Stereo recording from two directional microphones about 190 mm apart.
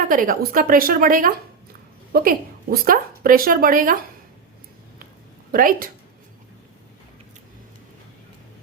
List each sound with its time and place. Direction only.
0.1 s a woman's voice: 45° right (ahead or behind)
5.5 s a woman's voice: 50° right (ahead or behind)